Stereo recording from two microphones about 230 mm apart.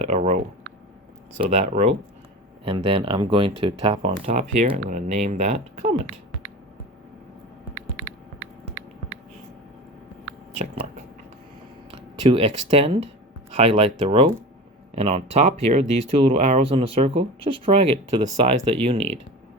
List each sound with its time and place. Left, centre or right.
0.0 s speech: right
1.4 s speech: right
7.8 s a sound: right
11.9 s speech: right